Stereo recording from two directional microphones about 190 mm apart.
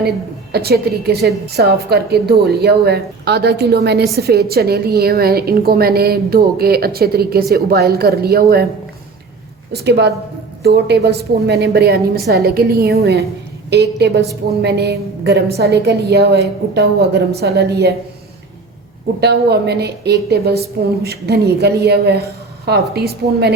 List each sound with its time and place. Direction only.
0.5 s a woman's voice: 55° right (ahead or behind)
9.7 s a woman's voice: 60° right (ahead or behind)
19.2 s a woman's voice: 60° right (ahead or behind)